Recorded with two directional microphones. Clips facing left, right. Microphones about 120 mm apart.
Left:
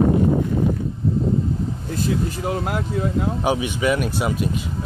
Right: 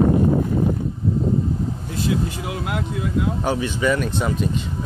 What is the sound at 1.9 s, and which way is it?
Speech, 40° left (ahead or behind).